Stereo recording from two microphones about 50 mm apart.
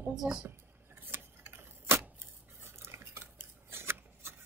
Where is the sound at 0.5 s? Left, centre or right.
Right.